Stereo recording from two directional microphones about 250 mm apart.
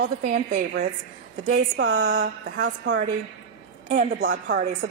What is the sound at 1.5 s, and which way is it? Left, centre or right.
A woman's voice, right.